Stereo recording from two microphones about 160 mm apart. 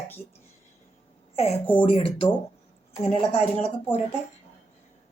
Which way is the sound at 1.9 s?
35° left (ahead or behind).